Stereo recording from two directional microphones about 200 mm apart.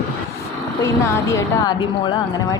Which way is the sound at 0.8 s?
15° left (ahead or behind).